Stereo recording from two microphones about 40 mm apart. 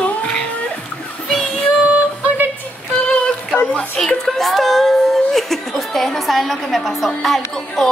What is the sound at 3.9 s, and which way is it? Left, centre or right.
Speech, centre.